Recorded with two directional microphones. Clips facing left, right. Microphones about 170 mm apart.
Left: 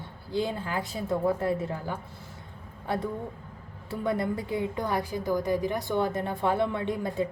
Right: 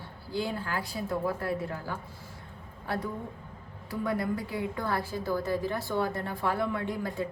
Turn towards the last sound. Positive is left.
turn(degrees=20)  # may be behind; listen again after turning